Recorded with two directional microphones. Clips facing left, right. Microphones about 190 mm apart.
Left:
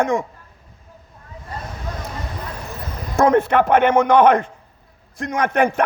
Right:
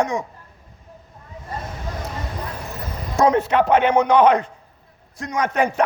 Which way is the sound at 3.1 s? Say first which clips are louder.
Left 2 dB; 50° left (ahead or behind).